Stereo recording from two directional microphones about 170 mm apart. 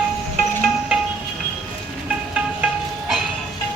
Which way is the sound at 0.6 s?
5° right (ahead or behind).